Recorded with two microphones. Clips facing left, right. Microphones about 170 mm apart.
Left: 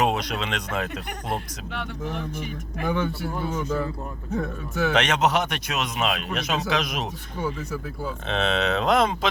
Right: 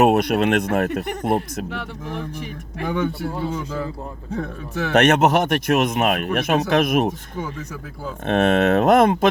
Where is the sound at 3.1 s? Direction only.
30° right (ahead or behind).